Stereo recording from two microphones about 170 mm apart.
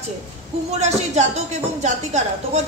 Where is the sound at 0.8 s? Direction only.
40° right (ahead or behind).